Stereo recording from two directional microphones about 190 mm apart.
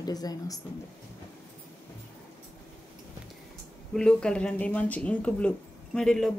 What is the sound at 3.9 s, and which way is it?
Speech, 5° left (ahead or behind).